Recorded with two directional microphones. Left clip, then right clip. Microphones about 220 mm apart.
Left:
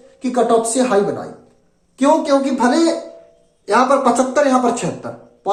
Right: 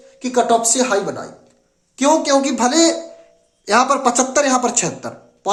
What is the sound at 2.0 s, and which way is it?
A man's voice, 50° right (ahead or behind).